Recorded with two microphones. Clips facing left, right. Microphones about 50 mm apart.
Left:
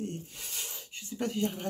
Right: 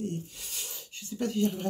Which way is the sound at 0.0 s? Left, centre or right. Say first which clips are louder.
Right 3 dB; left.